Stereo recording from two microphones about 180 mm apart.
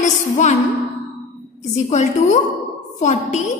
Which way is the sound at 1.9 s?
40° left (ahead or behind).